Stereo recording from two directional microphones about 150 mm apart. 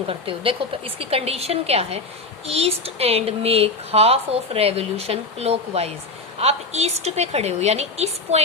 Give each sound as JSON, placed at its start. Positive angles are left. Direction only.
{"t": 0.1, "sound": "speech", "side_deg": -35}